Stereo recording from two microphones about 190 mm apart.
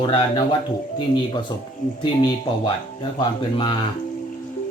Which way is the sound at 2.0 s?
25° left (ahead or behind).